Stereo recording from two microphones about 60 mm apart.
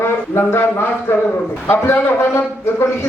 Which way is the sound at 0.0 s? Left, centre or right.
Left.